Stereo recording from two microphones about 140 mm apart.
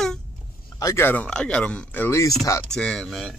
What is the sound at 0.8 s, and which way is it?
Speech, 20° left (ahead or behind).